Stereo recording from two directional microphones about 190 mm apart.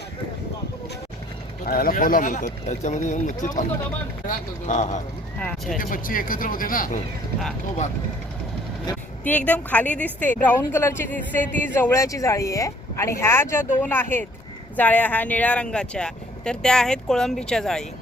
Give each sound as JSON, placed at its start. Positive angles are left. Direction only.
{"t": 1.6, "sound": "speech", "side_deg": 50}
{"t": 5.4, "sound": "speech", "side_deg": 10}
{"t": 5.7, "sound": "speech", "side_deg": 45}
{"t": 9.2, "sound": "a woman's voice", "side_deg": 10}